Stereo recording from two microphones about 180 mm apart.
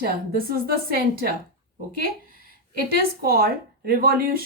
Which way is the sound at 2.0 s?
50° right (ahead or behind).